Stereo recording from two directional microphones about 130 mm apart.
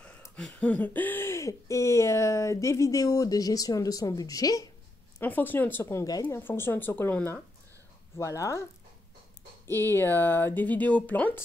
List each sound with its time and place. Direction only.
0.4 s speech: 10° left (ahead or behind); by 4.6 s 25° left (ahead or behind)
5.2 s speech: 15° left (ahead or behind)
9.7 s speech: 20° left (ahead or behind)